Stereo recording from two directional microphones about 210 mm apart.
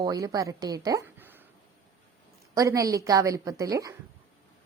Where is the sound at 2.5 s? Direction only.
15° right (ahead or behind).